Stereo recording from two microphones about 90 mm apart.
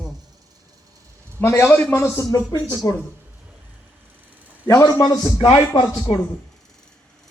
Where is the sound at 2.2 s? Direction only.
45° left (ahead or behind).